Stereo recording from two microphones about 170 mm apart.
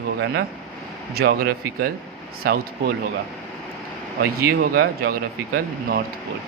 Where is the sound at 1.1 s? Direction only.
65° right (ahead or behind).